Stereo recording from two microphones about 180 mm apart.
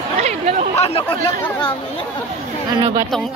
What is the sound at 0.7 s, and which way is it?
Chatter, 35° left (ahead or behind).